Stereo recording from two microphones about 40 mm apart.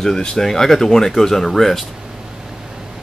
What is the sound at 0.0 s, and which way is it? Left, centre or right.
Speech, centre.